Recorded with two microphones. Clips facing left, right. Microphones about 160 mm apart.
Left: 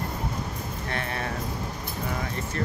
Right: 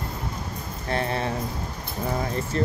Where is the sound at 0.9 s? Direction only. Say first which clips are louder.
Right 7 dB; 30° right (ahead or behind).